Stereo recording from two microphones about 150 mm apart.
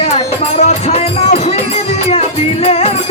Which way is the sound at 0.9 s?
45° left (ahead or behind).